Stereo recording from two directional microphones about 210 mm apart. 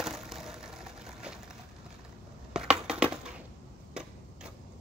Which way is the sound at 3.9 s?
5° right (ahead or behind).